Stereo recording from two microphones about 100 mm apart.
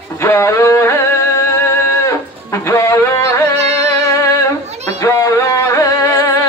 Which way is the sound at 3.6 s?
90° right.